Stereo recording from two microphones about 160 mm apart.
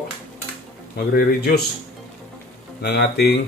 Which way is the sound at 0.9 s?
70° left (ahead or behind).